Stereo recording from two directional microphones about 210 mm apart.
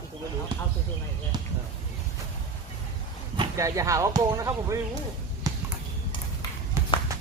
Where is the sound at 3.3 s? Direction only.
15° right (ahead or behind).